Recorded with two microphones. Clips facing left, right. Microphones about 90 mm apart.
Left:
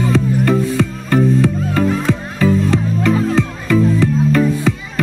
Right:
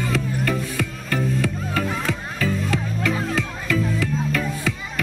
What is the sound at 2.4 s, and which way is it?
Music, 25° left (ahead or behind).